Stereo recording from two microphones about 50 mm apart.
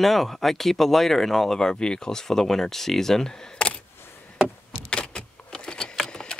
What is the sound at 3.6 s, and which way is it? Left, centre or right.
Single-lens reflex camera, left.